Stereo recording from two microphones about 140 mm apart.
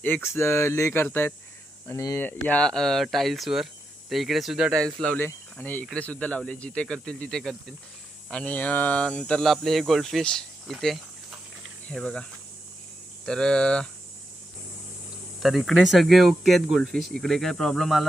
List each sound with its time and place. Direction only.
0.0 s speech: 15° left (ahead or behind)
13.2 s speech: 5° left (ahead or behind)
15.4 s speech: centre (ahead or behind)